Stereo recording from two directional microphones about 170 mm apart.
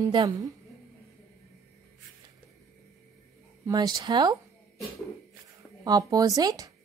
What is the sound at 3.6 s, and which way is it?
Speech, 25° right (ahead or behind).